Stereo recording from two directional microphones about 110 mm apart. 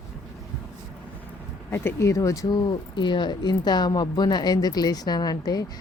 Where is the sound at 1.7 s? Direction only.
20° left (ahead or behind).